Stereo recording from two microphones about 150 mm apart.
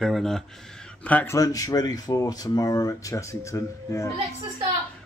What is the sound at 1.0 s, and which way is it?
Speech, 15° left (ahead or behind).